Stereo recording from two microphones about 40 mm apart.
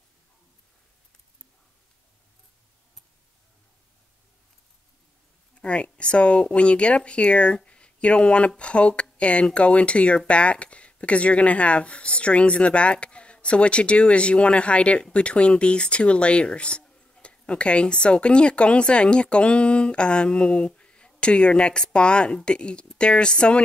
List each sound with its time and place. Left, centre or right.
5.6 s speech: left